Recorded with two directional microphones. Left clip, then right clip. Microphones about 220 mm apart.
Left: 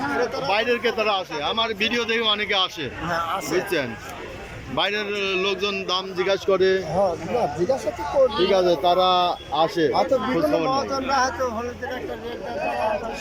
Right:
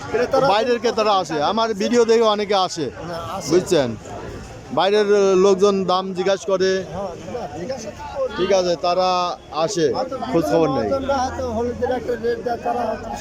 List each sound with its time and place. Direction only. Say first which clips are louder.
0.2 s speech: right 12 dB; 55° right (ahead or behind)
0.5 s a man's voice: right 3 dB; 15° right (ahead or behind)
8.4 s a man's voice: right 1 dB; 10° right (ahead or behind)
10.7 s speech: right 2 dB; 5° right (ahead or behind)